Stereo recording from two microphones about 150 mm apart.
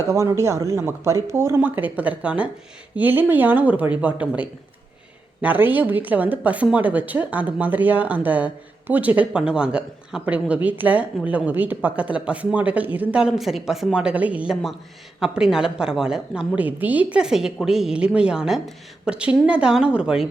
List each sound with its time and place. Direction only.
0.1 s a woman's voice: 20° right (ahead or behind)